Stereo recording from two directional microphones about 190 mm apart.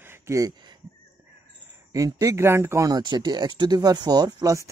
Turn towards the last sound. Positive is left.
turn(degrees=-15)  # may be behind; listen again after turning